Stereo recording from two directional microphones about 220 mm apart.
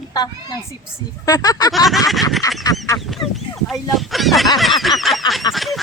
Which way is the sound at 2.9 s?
Centre (ahead or behind).